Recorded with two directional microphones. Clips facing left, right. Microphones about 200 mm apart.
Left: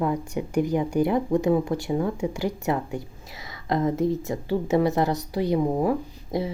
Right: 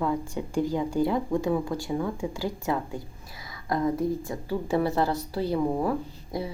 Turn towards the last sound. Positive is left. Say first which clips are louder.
# left 5 dB
turn(degrees=25)  # may be behind; listen again after turning